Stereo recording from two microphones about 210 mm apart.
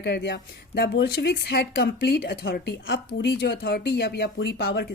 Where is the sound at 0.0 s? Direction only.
55° left (ahead or behind).